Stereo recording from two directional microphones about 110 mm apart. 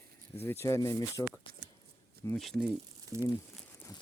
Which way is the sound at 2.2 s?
30° left (ahead or behind).